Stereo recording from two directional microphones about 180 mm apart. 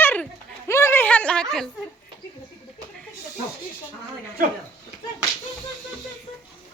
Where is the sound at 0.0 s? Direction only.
10° left (ahead or behind).